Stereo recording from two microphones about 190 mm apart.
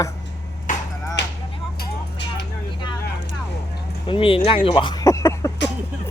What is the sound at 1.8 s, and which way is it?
Vehicle, 65° left (ahead or behind).